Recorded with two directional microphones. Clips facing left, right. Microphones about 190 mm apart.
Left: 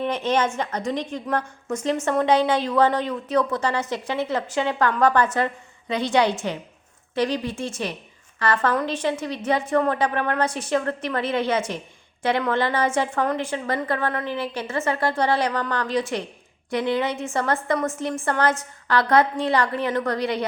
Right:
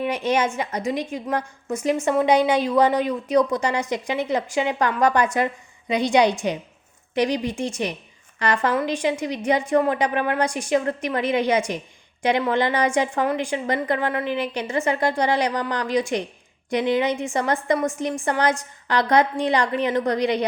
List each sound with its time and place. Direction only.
0.0 s a woman's voice: 10° right (ahead or behind)